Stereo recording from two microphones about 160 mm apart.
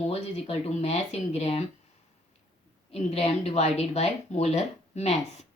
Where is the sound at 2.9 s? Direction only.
40° left (ahead or behind).